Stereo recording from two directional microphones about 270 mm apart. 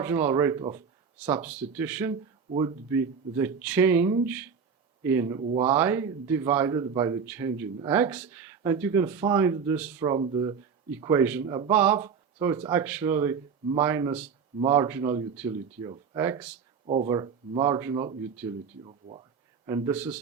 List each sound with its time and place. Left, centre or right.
0.0 s a man's voice: centre
5.5 s a man's voice: centre
16.8 s a man's voice: right
19.6 s a man's voice: centre